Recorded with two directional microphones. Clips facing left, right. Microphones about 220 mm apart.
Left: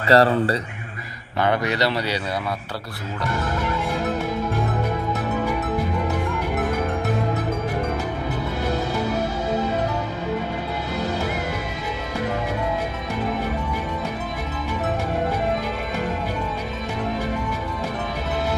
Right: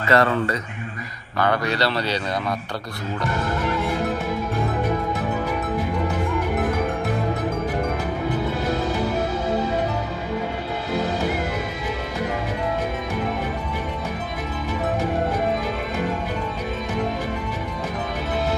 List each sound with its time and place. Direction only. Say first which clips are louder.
0.1 s speech: left 3 dB; 35° left (ahead or behind)
1.4 s speech: even; 20° left (ahead or behind)